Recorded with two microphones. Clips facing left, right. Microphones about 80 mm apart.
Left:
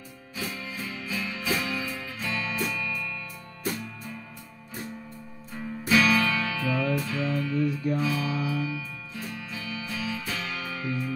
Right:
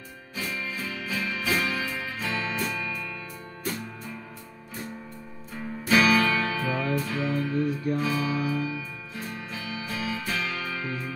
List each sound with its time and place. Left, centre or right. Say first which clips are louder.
0.4 s music: right 2 dB; right
2.2 s music: even; right
5.9 s music: right 1 dB; right